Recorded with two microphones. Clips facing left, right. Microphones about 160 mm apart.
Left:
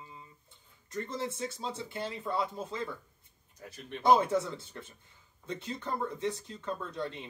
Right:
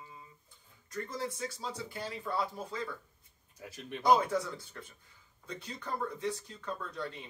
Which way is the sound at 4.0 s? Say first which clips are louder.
Left 2 dB; 25° left (ahead or behind).